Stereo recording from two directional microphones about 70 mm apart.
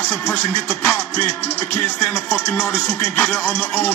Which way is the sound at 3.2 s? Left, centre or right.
Left.